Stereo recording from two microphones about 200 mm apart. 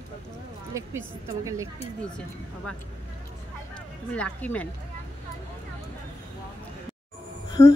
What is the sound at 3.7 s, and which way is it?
Speech, 5° left (ahead or behind).